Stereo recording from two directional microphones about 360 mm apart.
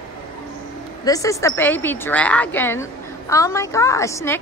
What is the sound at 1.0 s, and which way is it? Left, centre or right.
A woman's voice, centre.